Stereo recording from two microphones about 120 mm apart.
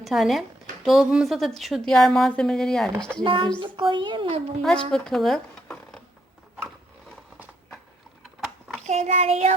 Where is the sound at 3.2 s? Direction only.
45° right (ahead or behind).